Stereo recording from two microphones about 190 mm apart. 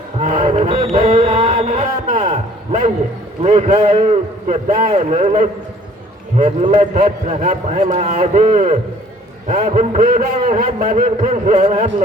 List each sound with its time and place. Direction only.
0.2 s music: 40° right (ahead or behind)
0.9 s a man's voice: 30° right (ahead or behind)
6.7 s a man's voice: 40° right (ahead or behind)